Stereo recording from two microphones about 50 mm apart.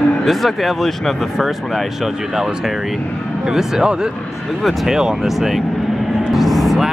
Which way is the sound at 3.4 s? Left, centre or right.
Centre.